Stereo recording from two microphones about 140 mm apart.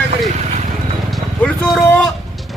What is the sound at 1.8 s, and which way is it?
Speech, 10° left (ahead or behind).